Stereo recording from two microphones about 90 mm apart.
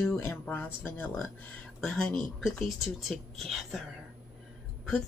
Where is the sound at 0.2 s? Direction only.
25° left (ahead or behind); by 3.8 s centre (ahead or behind).